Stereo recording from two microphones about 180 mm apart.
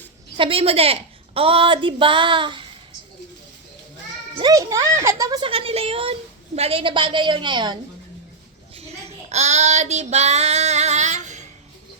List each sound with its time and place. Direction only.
0.3 s a woman's voice: 30° right (ahead or behind)
4.4 s a woman's voice: 20° right (ahead or behind)
5.5 s a woman's voice: 30° right (ahead or behind)
8.7 s child singing: 35° right (ahead or behind)